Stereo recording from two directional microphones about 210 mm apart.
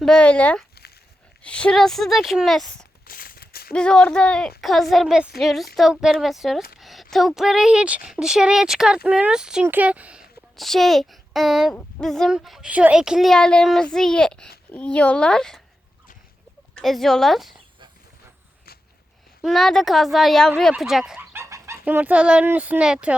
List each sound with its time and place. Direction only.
0.0 s speech: 5° left (ahead or behind)
3.1 s a sound: 45° left (ahead or behind)
3.7 s speech: 5° left (ahead or behind)
16.7 s speech: centre (ahead or behind)
19.4 s speech: centre (ahead or behind)
20.6 s chicken: centre (ahead or behind)
21.8 s speech: 5° right (ahead or behind)